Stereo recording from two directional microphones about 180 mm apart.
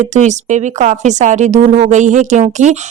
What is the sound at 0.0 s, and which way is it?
Speech, 40° right (ahead or behind).